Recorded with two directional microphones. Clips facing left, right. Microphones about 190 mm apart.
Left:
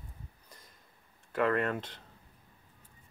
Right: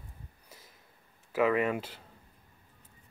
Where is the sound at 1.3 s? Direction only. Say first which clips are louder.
Right 2 dB; 5° right (ahead or behind).